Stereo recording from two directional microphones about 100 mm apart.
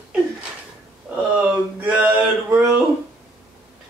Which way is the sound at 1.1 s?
15° right (ahead or behind).